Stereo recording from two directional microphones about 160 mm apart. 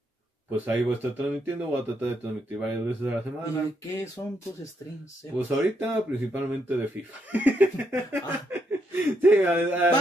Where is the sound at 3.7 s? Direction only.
20° left (ahead or behind).